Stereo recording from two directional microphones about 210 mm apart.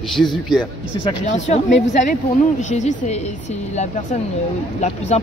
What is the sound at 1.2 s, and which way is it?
Speech, 35° left (ahead or behind).